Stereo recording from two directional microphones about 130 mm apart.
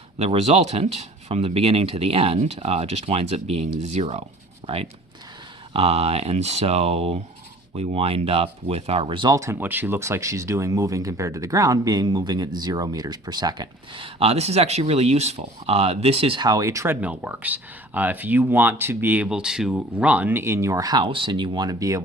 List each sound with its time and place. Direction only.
0.2 s speech: 55° right (ahead or behind)
4.6 s speech: 45° right (ahead or behind)
9.3 s speech: 20° right (ahead or behind); by 16.5 s 45° right (ahead or behind)
16.5 s speech: 25° right (ahead or behind)